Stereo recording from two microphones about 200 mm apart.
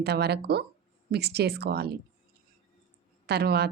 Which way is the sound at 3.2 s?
55° right (ahead or behind).